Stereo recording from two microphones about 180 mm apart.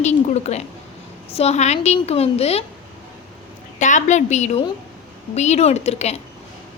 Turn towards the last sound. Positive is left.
turn(degrees=35)  # may be behind; listen again after turning